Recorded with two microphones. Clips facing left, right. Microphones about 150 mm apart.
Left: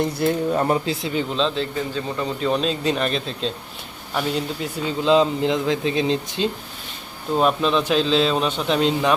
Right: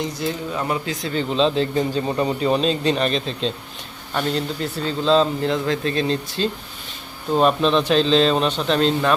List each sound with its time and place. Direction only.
0.0 s speech: 60° left (ahead or behind)
0.5 s speech: 35° left (ahead or behind)
1.3 s speech: 5° right (ahead or behind)
1.5 s a man's voice: 20° right (ahead or behind)
2.4 s speech: centre (ahead or behind); by 6.5 s 15° left (ahead or behind)
7.3 s speech: 5° left (ahead or behind)